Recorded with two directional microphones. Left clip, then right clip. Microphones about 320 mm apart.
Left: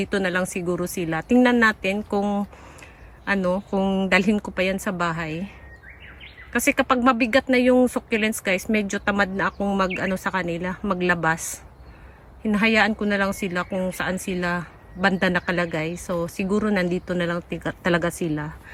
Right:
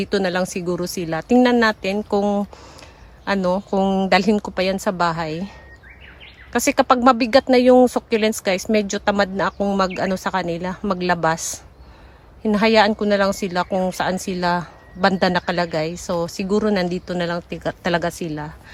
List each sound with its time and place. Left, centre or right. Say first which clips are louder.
0.0 s a woman's voice: right 3 dB; centre
6.5 s a woman's voice: right 4 dB; centre
12.4 s a woman's voice: right 4 dB; centre